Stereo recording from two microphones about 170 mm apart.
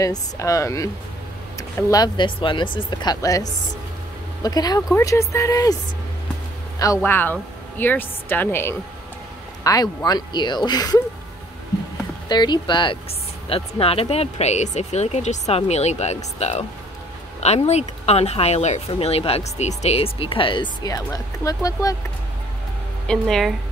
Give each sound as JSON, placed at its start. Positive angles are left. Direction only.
{"t": 0.0, "sound": "a woman's voice", "side_deg": 20}
{"t": 6.8, "sound": "a woman's voice", "side_deg": 15}
{"t": 12.3, "sound": "speech", "side_deg": 25}
{"t": 23.0, "sound": "speech", "side_deg": 0}